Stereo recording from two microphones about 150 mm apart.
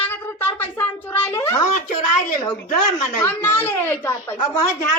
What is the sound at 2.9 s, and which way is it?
A woman's voice, 15° left (ahead or behind).